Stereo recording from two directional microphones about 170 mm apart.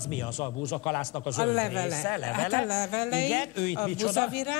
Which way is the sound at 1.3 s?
5° left (ahead or behind).